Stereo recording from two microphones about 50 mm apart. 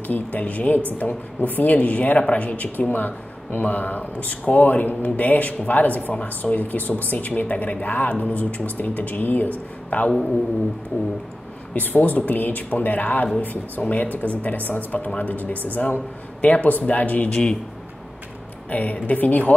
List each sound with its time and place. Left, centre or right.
0.0 s speech: left
9.8 s a man's voice: left
11.7 s speech: left
17.3 s speech: centre
18.7 s speech: left